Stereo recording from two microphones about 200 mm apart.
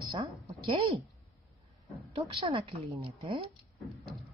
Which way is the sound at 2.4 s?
25° right (ahead or behind).